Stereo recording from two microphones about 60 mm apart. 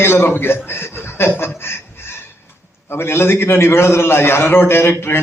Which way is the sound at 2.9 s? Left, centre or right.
Left.